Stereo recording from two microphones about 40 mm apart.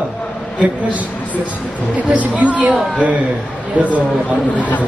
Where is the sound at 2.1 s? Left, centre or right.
Right.